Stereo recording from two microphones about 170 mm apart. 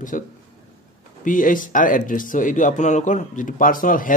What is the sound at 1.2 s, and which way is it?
Speech, 50° left (ahead or behind).